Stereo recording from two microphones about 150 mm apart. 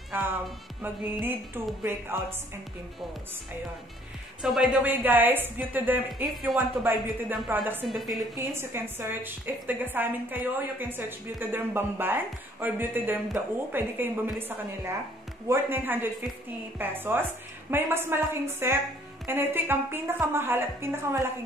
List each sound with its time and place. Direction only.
0.1 s speech: 15° right (ahead or behind)
1.8 s a woman's voice: 15° right (ahead or behind)
4.4 s a woman's voice: 5° right (ahead or behind)
7.9 s a woman's voice: centre (ahead or behind)
8.5 s a woman's voice: 15° right (ahead or behind)
15.4 s a woman's voice: 15° right (ahead or behind)